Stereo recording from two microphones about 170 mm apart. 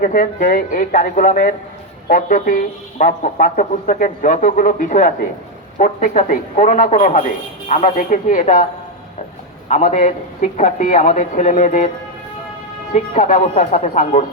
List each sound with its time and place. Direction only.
0.0 s speech: 55° left (ahead or behind)
9.6 s speech: 45° left (ahead or behind)
12.9 s speech: 45° left (ahead or behind)